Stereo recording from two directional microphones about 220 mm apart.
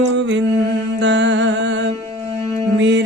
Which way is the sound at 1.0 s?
55° right (ahead or behind).